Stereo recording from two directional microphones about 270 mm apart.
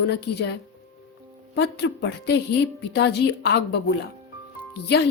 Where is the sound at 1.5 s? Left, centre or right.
Left.